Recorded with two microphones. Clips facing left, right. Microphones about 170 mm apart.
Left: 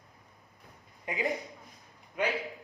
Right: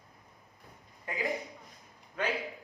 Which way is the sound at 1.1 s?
20° left (ahead or behind).